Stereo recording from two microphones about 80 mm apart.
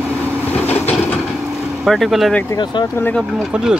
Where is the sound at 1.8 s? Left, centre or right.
Centre.